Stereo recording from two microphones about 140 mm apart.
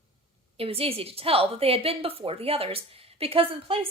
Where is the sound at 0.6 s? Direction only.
45° right (ahead or behind).